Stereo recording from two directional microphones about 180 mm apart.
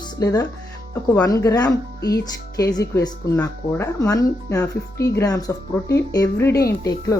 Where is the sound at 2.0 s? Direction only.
60° left (ahead or behind).